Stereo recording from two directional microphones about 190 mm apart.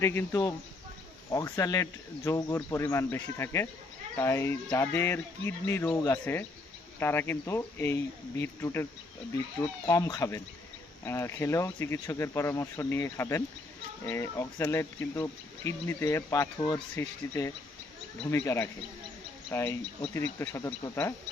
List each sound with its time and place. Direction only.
0.0 s speech: 10° left (ahead or behind)
16.9 s speech: 15° left (ahead or behind)